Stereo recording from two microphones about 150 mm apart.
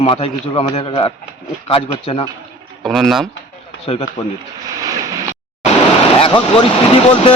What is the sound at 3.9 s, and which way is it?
Speech, 40° left (ahead or behind).